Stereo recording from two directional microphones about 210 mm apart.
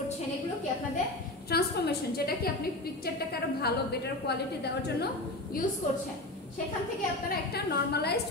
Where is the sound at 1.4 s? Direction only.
50° left (ahead or behind).